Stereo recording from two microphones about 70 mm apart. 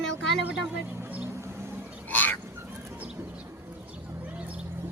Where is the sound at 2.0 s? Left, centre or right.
Left.